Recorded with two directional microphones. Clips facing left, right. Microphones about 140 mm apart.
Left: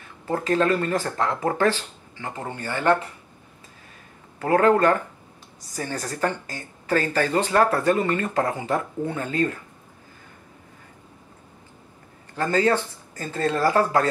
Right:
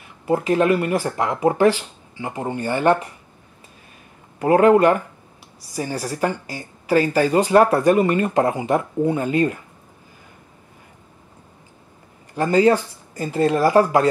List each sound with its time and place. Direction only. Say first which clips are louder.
0.0 s speech: right 6 dB; 15° right (ahead or behind)
4.4 s speech: right 5 dB; 15° right (ahead or behind)
12.4 s speech: right 5 dB; 15° right (ahead or behind)